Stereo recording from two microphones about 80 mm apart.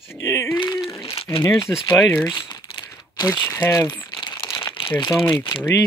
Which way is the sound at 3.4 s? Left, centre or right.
Left.